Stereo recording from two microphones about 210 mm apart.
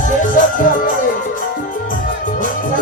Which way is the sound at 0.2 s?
40° left (ahead or behind).